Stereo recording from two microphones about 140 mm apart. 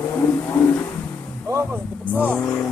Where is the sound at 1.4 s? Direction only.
20° right (ahead or behind).